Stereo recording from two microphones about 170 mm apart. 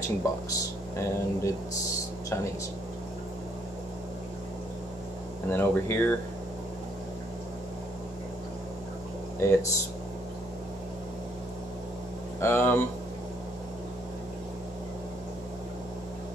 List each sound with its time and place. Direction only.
0.2 s speech: 15° left (ahead or behind)
5.5 s speech: 15° left (ahead or behind)
9.4 s speech: 15° left (ahead or behind)
12.4 s speech: 15° left (ahead or behind)